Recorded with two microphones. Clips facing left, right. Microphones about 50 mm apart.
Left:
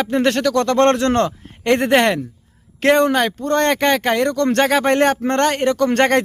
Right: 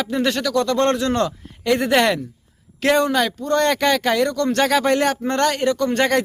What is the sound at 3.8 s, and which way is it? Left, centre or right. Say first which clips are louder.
Speech: left 1 dB; left.